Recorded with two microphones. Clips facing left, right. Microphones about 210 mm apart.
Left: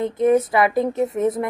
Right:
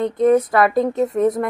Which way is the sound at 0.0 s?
5° left (ahead or behind).